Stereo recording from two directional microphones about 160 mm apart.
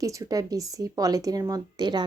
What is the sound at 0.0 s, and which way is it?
Speech, 20° right (ahead or behind).